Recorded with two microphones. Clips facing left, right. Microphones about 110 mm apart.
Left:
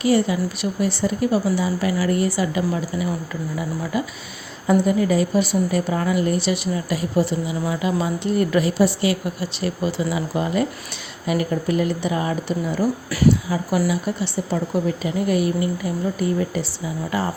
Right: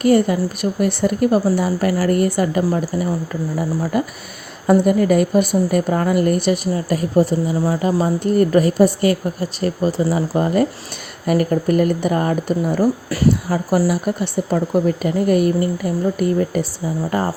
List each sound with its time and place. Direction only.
0.0 s speech: 50° right (ahead or behind)
4.6 s speech: 55° right (ahead or behind)